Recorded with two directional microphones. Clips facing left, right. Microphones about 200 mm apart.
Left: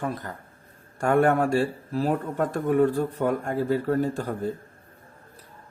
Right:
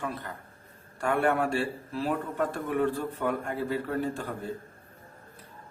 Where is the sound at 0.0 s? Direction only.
45° left (ahead or behind).